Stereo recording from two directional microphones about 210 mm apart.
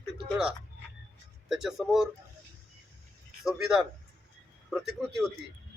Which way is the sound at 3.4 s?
Centre (ahead or behind).